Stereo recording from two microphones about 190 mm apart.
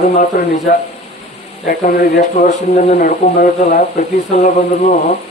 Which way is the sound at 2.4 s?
40° left (ahead or behind).